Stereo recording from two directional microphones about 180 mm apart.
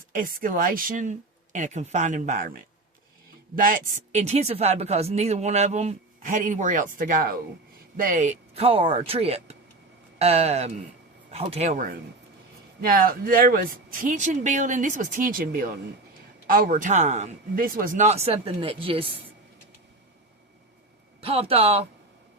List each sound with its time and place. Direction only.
0.1 s speech: 50° right (ahead or behind)
3.6 s speech: 50° right (ahead or behind)
12.9 s speech: 55° right (ahead or behind); by 19.0 s 30° right (ahead or behind)
21.2 s speech: 30° right (ahead or behind)